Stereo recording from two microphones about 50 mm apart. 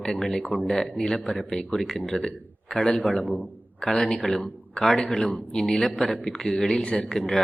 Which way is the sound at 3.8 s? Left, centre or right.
Centre.